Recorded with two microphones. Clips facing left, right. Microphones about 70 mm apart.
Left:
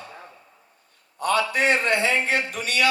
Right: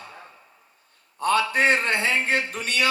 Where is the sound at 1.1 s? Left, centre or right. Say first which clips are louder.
Right 1 dB; right.